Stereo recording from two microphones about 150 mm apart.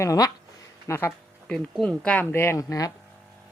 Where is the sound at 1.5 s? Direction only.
5° left (ahead or behind); by 2.9 s 20° left (ahead or behind).